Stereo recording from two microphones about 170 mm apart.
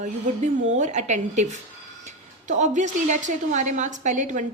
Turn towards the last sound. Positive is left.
turn(degrees=-45)  # may be behind; listen again after turning